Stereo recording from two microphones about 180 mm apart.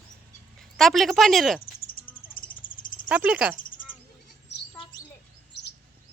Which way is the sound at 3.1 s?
5° right (ahead or behind).